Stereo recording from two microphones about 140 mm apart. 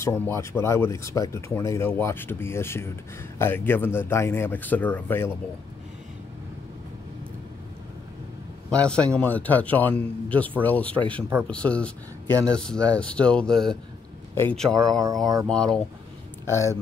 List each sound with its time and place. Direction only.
0.0 s speech: 20° left (ahead or behind)
8.6 s speech: 5° left (ahead or behind)
12.3 s speech: 25° right (ahead or behind)
12.5 s speech: 5° left (ahead or behind)
14.3 s speech: 15° left (ahead or behind)
14.6 s speech: 5° left (ahead or behind)
16.4 s speech: 20° left (ahead or behind)